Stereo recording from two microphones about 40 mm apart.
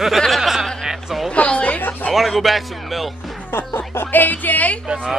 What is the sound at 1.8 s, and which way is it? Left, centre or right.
Speech, left.